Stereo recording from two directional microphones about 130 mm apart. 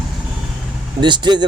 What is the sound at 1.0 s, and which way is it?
Speech, 35° right (ahead or behind).